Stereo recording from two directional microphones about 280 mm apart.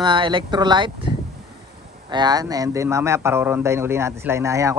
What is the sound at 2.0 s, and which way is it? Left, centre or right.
A man's voice, centre.